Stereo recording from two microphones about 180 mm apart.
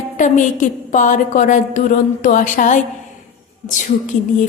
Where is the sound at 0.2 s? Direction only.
45° left (ahead or behind).